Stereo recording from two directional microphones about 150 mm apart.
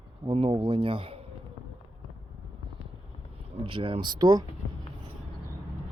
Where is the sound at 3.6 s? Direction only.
35° right (ahead or behind).